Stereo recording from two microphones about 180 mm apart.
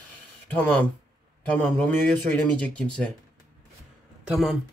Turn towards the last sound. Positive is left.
turn(degrees=0)  # may be behind; listen again after turning